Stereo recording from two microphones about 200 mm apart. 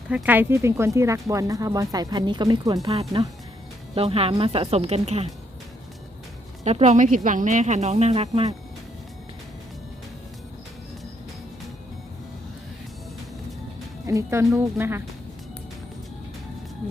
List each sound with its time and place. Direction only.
0.1 s speech: 10° right (ahead or behind)
2.9 s speech: 30° right (ahead or behind)
6.7 s speech: 35° right (ahead or behind)
14.1 s speech: 15° right (ahead or behind)